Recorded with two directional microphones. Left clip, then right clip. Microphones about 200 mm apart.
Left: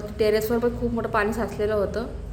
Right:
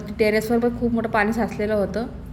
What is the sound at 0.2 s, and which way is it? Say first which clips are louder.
A woman's voice: right 2 dB; 10° right (ahead or behind).